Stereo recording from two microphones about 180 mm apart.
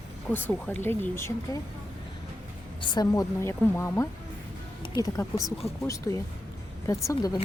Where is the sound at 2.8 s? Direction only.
25° left (ahead or behind).